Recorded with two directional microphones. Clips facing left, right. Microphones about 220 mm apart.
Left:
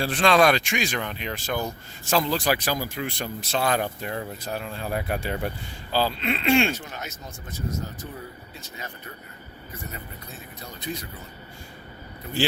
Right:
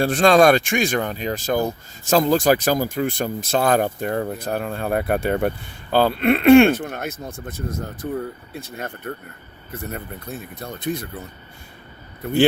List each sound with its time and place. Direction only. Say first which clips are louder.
0.0 s speech: right 6 dB; 45° right (ahead or behind)